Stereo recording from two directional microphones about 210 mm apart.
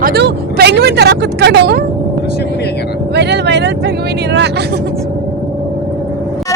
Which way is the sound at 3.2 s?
55° right (ahead or behind).